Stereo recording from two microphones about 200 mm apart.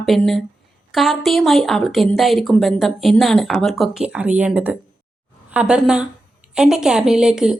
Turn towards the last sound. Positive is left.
turn(degrees=-5)  # may be behind; listen again after turning